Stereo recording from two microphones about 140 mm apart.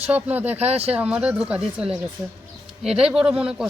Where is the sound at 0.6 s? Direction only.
45° right (ahead or behind).